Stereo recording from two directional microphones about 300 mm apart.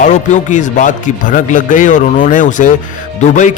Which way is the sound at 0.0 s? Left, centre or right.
Left.